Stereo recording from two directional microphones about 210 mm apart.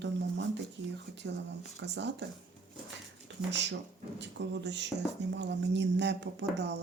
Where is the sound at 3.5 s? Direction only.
55° right (ahead or behind).